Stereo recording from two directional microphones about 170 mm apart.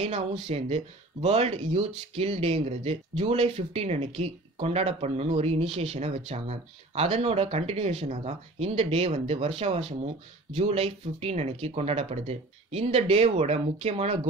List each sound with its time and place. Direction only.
0.1 s speech: 40° right (ahead or behind)